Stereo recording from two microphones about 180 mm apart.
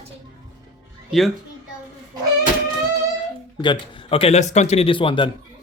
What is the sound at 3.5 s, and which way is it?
A man's voice, 25° left (ahead or behind).